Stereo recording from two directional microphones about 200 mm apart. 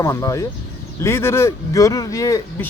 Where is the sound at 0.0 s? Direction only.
15° left (ahead or behind).